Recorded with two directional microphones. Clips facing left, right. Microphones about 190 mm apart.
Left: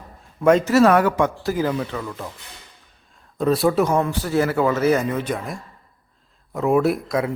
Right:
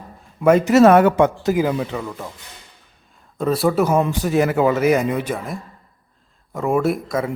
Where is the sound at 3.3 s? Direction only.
Centre (ahead or behind).